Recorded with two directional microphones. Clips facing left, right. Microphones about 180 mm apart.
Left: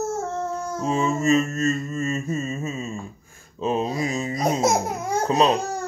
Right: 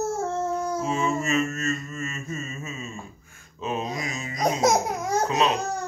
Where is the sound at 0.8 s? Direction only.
35° left (ahead or behind).